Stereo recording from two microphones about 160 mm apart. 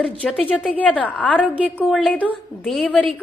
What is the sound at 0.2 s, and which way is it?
A woman's voice, centre (ahead or behind).